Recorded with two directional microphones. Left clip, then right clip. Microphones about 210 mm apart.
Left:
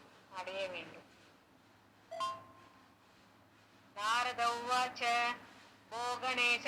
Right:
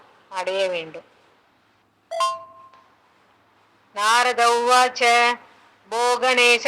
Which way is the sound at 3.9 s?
50° right (ahead or behind).